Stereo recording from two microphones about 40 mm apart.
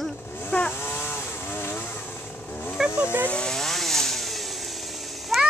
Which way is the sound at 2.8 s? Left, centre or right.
Centre.